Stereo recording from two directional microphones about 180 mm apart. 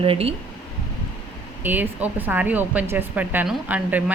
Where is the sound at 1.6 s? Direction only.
10° right (ahead or behind).